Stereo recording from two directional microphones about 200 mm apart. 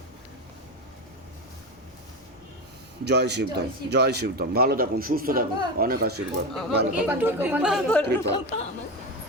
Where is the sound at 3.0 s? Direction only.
55° right (ahead or behind).